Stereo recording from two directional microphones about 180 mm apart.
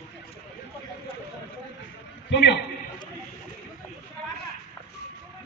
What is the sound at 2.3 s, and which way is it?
Speech, 75° left (ahead or behind).